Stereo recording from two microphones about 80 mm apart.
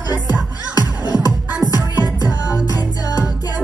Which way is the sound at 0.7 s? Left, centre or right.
Left.